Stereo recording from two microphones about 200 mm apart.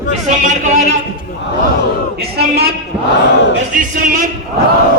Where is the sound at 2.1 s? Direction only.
50° right (ahead or behind).